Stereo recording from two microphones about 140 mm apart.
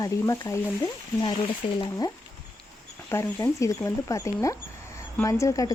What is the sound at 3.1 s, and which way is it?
Speech, 20° left (ahead or behind).